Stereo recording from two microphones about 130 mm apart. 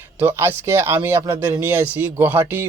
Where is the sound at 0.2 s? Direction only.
15° right (ahead or behind).